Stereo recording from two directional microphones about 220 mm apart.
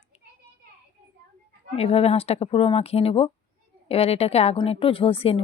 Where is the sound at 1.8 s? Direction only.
25° left (ahead or behind).